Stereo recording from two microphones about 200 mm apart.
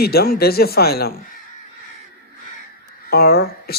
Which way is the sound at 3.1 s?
50° left (ahead or behind).